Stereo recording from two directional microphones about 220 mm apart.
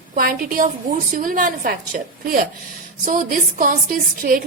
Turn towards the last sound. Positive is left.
turn(degrees=-40)  # may be behind; listen again after turning